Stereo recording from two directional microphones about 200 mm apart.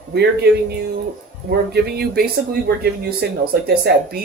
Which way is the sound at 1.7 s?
50° right (ahead or behind).